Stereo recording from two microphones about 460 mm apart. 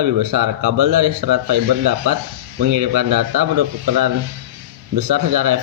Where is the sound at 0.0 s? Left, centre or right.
Right.